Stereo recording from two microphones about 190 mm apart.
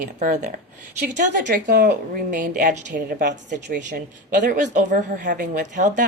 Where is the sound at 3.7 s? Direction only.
40° right (ahead or behind).